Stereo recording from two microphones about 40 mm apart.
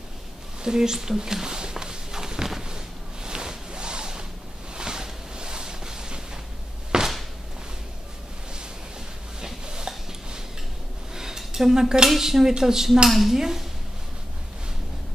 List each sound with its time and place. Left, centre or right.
0.6 s walk: centre
3.3 s a sound: right
9.4 s a sound: centre
11.1 s cutlery: centre
12.1 s speech: centre
13.1 s speech: centre